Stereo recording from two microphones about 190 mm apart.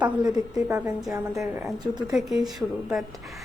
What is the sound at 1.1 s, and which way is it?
A woman's voice, 15° right (ahead or behind).